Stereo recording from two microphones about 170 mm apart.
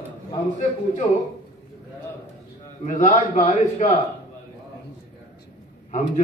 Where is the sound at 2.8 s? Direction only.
50° left (ahead or behind).